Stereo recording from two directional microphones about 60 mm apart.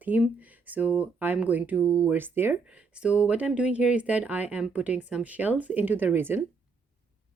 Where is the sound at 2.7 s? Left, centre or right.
Centre; by 6.4 s right.